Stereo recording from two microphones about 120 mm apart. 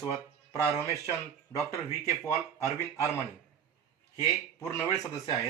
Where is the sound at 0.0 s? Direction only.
30° left (ahead or behind).